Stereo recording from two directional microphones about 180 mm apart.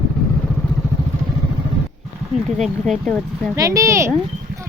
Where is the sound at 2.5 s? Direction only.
Centre (ahead or behind).